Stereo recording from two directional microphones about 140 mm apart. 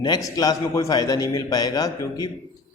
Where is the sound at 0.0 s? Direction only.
30° left (ahead or behind).